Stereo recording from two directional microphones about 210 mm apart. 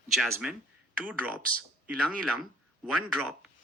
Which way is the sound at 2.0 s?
5° right (ahead or behind).